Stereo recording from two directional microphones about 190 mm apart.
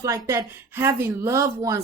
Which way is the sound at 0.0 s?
20° right (ahead or behind).